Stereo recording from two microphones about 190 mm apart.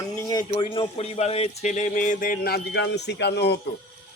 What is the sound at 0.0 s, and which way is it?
A man's voice, 20° left (ahead or behind).